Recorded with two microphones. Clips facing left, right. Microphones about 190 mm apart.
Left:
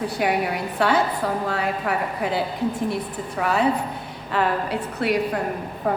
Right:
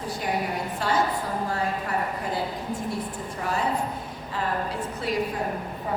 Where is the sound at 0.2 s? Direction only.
70° left (ahead or behind).